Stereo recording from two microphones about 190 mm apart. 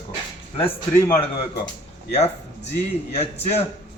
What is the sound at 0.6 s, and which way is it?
Speech, 15° left (ahead or behind).